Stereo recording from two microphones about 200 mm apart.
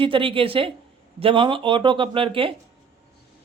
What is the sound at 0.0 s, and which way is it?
Speech, 25° right (ahead or behind).